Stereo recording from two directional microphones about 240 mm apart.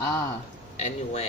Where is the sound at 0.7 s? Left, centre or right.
Left.